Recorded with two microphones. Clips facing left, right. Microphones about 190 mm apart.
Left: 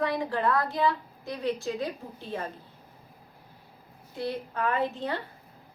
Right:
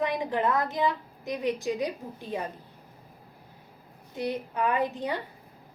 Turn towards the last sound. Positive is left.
turn(degrees=-15)  # may be behind; listen again after turning